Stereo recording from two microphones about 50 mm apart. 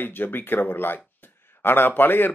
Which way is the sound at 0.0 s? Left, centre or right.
Left.